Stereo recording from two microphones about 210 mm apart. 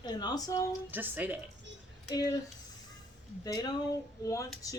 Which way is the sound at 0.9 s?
10° right (ahead or behind).